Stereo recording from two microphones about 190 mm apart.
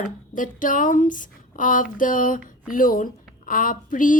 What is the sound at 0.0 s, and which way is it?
Speech, 45° left (ahead or behind).